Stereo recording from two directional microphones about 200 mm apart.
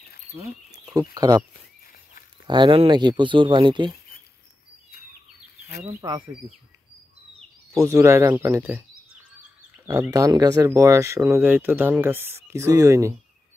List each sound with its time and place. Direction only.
0.7 s bird: 20° right (ahead or behind)
1.1 s speech: 20° right (ahead or behind)
2.4 s speech: 25° right (ahead or behind)
5.9 s speech: 15° right (ahead or behind)
7.8 s speech: 15° right (ahead or behind)
9.8 s speech: 15° right (ahead or behind)